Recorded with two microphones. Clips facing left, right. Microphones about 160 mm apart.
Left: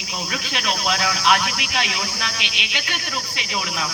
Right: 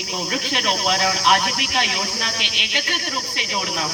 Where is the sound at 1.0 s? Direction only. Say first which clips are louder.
Even; 40° right (ahead or behind).